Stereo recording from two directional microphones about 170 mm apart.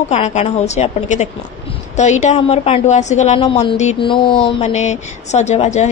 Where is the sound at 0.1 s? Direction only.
40° left (ahead or behind).